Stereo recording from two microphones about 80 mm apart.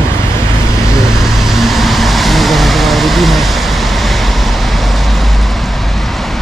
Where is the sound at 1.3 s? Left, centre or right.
Centre.